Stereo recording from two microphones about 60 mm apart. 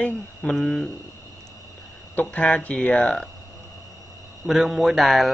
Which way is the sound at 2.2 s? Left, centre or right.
Left.